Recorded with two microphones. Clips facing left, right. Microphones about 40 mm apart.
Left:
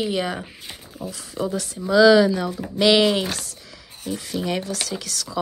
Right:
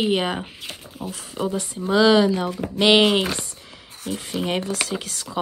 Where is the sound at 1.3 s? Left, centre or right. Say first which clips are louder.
Even; right.